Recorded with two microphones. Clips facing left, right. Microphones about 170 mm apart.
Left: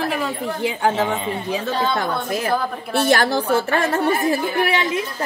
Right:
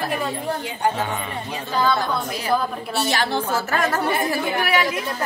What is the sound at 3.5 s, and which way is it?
A woman's voice, 30° left (ahead or behind).